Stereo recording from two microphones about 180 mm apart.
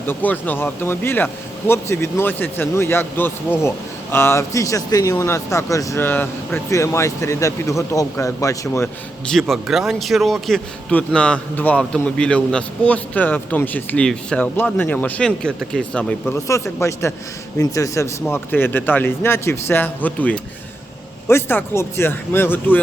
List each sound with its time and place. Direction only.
0.0 s speech: 10° left (ahead or behind)
9.3 s a man's voice: centre (ahead or behind)